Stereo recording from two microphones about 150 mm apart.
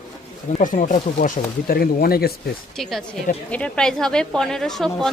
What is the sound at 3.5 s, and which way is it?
A woman's voice, 5° left (ahead or behind).